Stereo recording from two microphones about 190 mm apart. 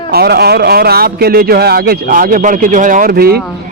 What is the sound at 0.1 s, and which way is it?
A man's voice, 55° right (ahead or behind).